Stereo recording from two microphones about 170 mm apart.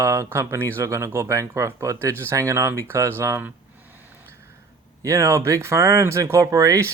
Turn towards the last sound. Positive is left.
turn(degrees=-20)  # may be behind; listen again after turning